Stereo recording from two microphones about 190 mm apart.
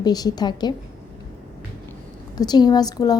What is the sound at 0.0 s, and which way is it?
Speech, 20° left (ahead or behind).